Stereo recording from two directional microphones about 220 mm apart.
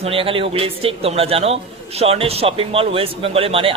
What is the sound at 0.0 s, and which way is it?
A man's voice, 25° right (ahead or behind).